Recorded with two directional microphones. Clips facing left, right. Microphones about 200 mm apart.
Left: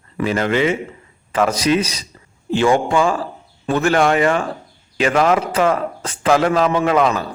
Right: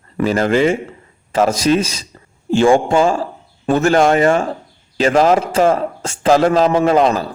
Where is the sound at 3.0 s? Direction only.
45° right (ahead or behind).